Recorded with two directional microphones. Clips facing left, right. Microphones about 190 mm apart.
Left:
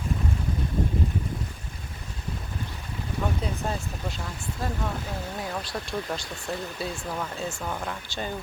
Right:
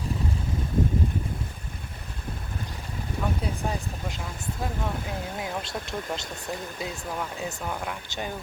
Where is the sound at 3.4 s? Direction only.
15° right (ahead or behind).